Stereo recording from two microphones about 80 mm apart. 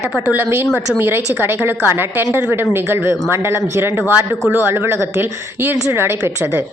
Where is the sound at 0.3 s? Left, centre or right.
Right.